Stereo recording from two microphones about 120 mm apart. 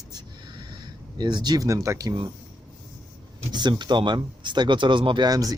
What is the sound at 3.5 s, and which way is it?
Speech, 40° right (ahead or behind).